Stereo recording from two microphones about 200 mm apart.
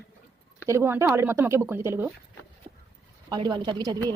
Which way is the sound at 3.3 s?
20° right (ahead or behind).